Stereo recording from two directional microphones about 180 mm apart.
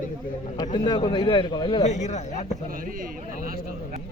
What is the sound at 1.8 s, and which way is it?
Speech, 40° left (ahead or behind).